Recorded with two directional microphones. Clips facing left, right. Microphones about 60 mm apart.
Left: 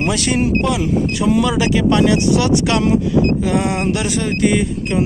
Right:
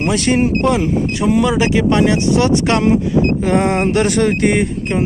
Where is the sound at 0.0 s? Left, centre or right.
Right.